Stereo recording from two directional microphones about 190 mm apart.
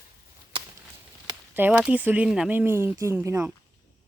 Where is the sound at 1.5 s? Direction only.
10° right (ahead or behind).